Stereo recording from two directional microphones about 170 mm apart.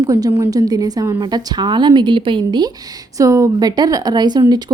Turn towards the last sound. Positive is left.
turn(degrees=-25)  # may be behind; listen again after turning